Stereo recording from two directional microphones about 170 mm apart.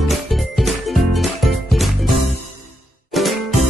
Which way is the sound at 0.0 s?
Centre (ahead or behind).